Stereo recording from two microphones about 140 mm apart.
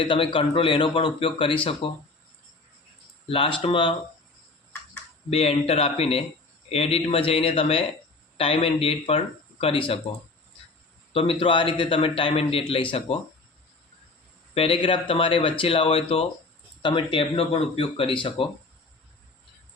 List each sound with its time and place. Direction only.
0.0 s a man's voice: 35° left (ahead or behind)
3.2 s a man's voice: 40° left (ahead or behind)
5.3 s speech: 45° left (ahead or behind)
11.1 s a man's voice: 40° left (ahead or behind)
14.5 s a man's voice: 40° left (ahead or behind)